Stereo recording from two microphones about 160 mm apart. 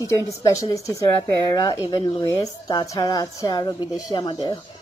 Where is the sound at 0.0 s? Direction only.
20° left (ahead or behind).